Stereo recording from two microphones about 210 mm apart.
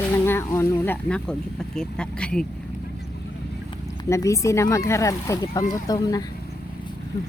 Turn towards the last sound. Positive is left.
turn(degrees=15)  # may be behind; listen again after turning